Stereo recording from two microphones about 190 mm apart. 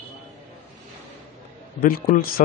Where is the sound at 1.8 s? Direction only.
45° left (ahead or behind).